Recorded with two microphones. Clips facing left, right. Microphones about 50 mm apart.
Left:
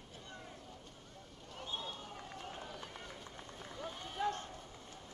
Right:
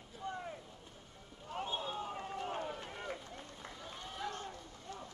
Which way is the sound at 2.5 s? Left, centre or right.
Right.